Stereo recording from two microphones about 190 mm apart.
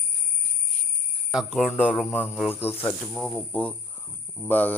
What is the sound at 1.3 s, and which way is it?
Speech, centre (ahead or behind).